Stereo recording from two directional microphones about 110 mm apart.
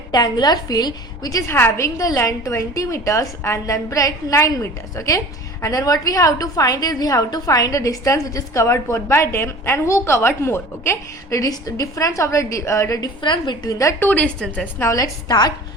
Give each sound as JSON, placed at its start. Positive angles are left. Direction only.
{"t": 0.1, "sound": "a woman's voice", "side_deg": 35}
{"t": 14.0, "sound": "a woman's voice", "side_deg": 15}
{"t": 14.8, "sound": "a woman's voice", "side_deg": 30}